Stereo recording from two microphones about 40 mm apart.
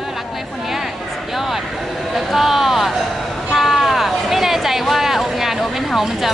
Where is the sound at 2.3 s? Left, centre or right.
Centre.